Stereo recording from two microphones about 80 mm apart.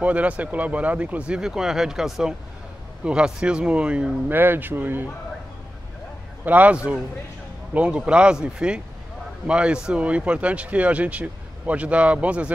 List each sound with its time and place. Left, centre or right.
0.0 s speech: centre
4.3 s speech: right
6.4 s speech: centre